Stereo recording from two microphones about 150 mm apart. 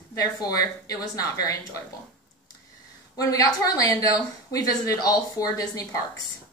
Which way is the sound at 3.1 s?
25° left (ahead or behind).